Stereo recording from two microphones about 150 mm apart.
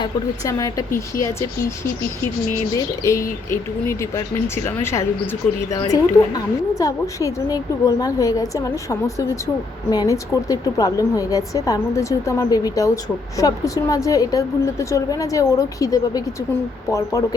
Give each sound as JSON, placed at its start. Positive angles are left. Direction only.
{"t": 0.4, "sound": "speech", "side_deg": 20}
{"t": 2.7, "sound": "speech", "side_deg": 20}